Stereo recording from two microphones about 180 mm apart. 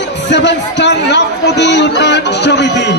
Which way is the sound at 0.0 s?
75° left (ahead or behind).